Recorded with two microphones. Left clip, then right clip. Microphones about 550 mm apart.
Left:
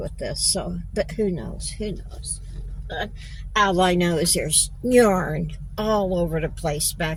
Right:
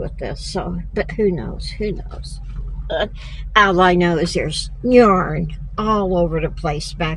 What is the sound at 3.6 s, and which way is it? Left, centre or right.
A woman's voice, left.